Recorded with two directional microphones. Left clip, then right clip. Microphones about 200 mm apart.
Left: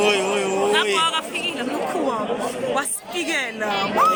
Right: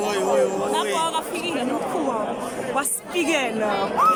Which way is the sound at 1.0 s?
25° right (ahead or behind).